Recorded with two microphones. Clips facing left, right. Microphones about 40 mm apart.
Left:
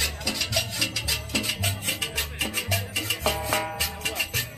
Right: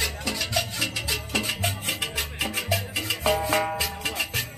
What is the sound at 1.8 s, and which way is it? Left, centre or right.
Music, right.